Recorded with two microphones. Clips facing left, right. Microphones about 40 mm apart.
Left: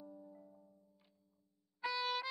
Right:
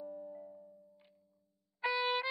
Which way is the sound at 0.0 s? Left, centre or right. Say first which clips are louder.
Right 9 dB; right.